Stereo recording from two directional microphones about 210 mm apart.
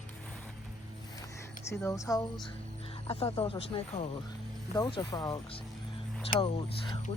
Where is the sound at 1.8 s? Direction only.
15° left (ahead or behind).